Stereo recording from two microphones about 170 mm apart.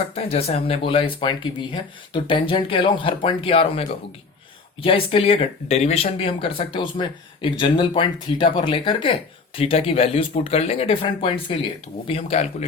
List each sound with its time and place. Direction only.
0.1 s speech: 35° left (ahead or behind)